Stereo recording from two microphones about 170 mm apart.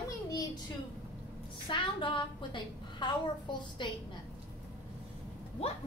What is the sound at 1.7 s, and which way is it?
A woman's voice, 30° left (ahead or behind).